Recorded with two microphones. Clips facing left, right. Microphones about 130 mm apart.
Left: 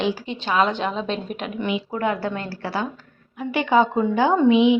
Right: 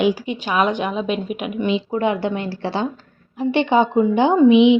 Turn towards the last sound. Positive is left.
turn(degrees=-20)  # may be behind; listen again after turning